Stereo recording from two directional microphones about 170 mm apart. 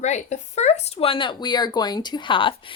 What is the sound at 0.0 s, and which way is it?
Speech, 45° left (ahead or behind).